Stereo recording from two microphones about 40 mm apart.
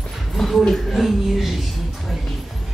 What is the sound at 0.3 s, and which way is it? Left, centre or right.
Speech, centre.